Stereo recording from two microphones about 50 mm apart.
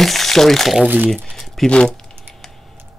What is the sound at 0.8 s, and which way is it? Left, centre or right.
Speech, right.